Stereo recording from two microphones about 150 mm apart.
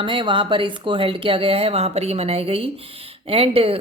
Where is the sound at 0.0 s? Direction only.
35° right (ahead or behind).